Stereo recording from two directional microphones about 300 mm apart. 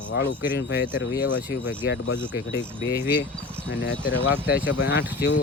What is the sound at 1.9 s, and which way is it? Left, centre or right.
Speech, left.